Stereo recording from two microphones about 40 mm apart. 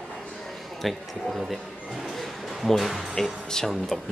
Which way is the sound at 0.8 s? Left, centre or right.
Centre.